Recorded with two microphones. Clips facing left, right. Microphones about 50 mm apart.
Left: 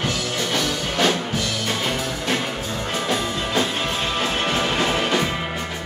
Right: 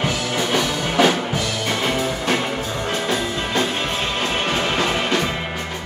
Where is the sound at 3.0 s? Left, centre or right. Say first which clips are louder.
Right 1 dB; centre.